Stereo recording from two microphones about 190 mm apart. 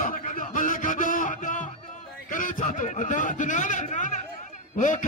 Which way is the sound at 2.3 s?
45° left (ahead or behind).